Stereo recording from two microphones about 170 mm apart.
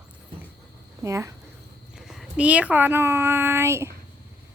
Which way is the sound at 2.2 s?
5° right (ahead or behind).